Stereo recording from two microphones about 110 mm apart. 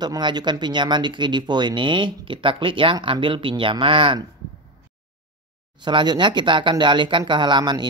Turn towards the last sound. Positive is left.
turn(degrees=-45)  # may be behind; listen again after turning